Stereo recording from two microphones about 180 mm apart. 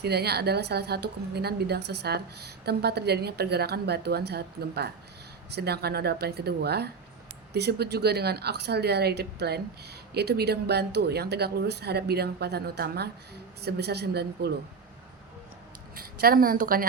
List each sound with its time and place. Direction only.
0.0 s a woman's voice: 65° right (ahead or behind)
16.0 s a woman's voice: 55° right (ahead or behind)